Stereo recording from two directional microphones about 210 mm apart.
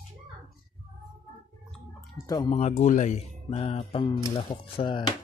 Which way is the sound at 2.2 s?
20° left (ahead or behind).